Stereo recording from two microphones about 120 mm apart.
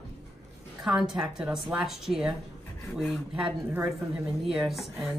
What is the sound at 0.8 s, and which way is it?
A woman's voice, 5° right (ahead or behind).